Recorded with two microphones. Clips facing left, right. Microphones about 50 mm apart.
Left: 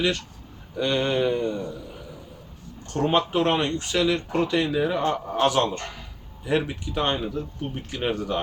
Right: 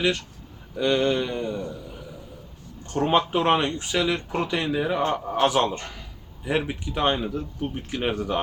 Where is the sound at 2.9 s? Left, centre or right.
Centre.